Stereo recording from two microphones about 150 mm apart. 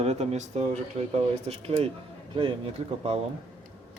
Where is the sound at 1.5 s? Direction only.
40° right (ahead or behind).